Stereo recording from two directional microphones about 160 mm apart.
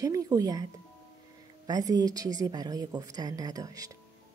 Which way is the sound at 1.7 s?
25° right (ahead or behind).